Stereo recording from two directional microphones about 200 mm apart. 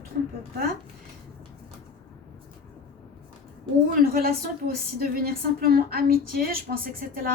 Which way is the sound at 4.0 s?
50° right (ahead or behind).